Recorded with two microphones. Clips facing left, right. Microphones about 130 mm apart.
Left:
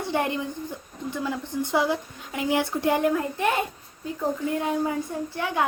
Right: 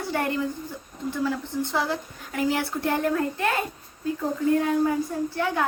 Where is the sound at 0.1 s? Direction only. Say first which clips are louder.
Right 1 dB; 20° left (ahead or behind).